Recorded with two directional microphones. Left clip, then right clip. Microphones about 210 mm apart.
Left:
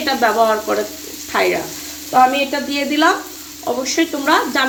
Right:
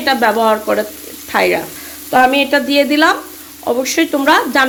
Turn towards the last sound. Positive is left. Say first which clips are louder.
# right 4 dB
turn(degrees=-40)  # may be behind; listen again after turning